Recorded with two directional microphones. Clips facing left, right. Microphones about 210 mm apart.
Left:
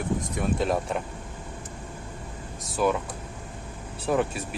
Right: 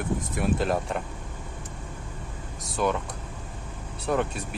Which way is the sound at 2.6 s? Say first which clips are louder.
Left 2 dB; centre (ahead or behind).